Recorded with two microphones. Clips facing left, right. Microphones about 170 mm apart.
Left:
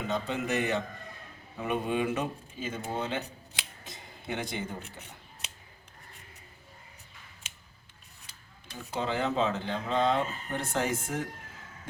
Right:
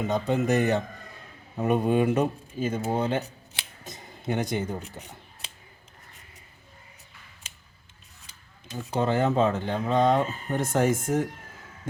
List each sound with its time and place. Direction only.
0.1 s speech: 45° right (ahead or behind)
9.0 s speech: 50° right (ahead or behind)